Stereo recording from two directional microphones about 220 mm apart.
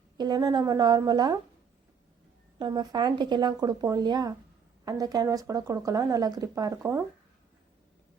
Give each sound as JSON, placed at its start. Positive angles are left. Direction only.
{"t": 0.2, "sound": "speech", "side_deg": -20}
{"t": 2.6, "sound": "speech", "side_deg": -20}